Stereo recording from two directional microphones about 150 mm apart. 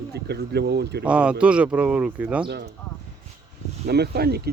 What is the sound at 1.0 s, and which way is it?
Speech, 5° right (ahead or behind).